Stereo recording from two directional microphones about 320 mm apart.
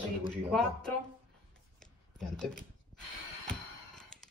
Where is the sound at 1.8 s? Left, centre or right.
Centre.